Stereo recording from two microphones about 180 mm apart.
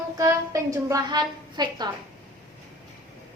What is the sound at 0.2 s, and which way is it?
A woman's voice, 20° right (ahead or behind).